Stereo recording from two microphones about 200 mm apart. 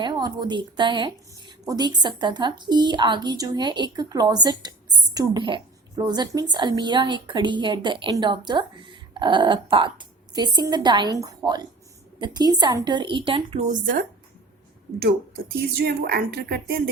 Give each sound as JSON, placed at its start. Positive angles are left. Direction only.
{"t": 0.0, "sound": "a woman's voice", "side_deg": -20}
{"t": 15.5, "sound": "speech", "side_deg": -50}